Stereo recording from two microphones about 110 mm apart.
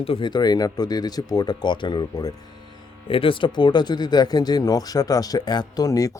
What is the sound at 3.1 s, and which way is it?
Speech, 55° left (ahead or behind).